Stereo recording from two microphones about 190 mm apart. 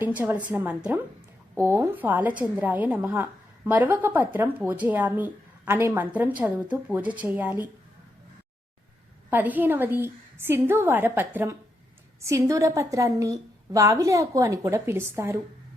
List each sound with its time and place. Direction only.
0.0 s a woman's voice: 10° right (ahead or behind)
9.3 s a woman's voice: 10° right (ahead or behind)